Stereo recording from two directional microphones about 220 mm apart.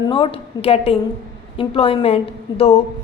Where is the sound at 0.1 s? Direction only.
25° left (ahead or behind).